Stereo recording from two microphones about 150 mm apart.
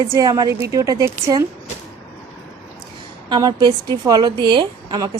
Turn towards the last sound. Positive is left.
turn(degrees=-25)  # may be behind; listen again after turning